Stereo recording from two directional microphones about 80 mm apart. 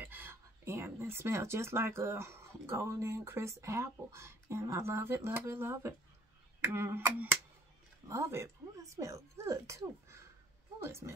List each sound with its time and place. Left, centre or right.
0.0 s speech: right
6.6 s a sound: right
8.1 s speech: right